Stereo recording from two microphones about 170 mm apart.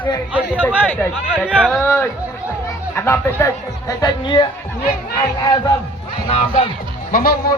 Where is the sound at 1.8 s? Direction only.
15° left (ahead or behind).